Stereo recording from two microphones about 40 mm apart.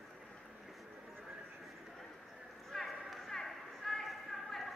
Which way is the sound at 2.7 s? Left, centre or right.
Centre.